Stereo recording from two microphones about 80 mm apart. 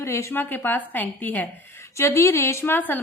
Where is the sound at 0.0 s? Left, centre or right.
Left.